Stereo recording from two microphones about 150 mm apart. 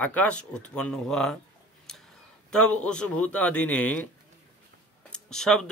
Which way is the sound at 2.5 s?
5° left (ahead or behind).